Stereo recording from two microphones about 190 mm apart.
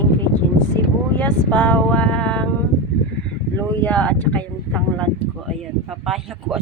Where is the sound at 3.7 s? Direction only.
5° left (ahead or behind).